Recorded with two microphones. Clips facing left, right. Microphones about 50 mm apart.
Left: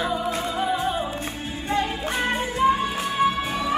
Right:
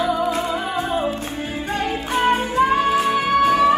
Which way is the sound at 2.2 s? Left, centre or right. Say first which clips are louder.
Right 4 dB; right.